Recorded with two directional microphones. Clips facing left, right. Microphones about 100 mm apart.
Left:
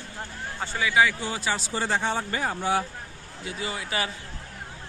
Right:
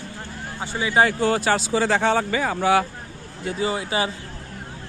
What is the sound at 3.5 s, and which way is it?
Speech, 25° right (ahead or behind).